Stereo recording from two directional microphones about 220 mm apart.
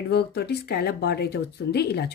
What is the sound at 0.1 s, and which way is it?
Speech, 50° left (ahead or behind).